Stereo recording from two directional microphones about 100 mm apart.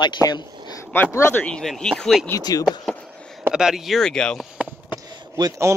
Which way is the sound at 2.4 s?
40° left (ahead or behind).